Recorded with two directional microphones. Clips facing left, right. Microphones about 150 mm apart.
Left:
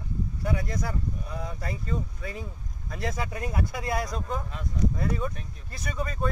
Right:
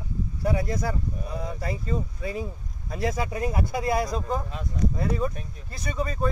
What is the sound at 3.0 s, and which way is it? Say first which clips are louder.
Speech: right 5 dB; 10° right (ahead or behind).